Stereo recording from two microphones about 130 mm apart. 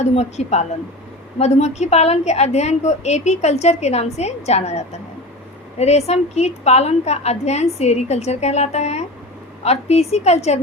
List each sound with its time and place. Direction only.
0.0 s a woman's voice: 60° left (ahead or behind)